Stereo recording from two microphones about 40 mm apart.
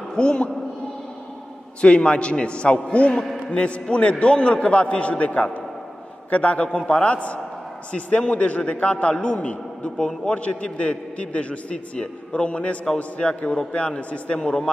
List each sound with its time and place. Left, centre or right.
0.1 s a man's voice: left
1.8 s a man's voice: left